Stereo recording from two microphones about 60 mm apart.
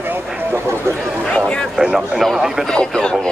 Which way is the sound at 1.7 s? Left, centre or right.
Centre.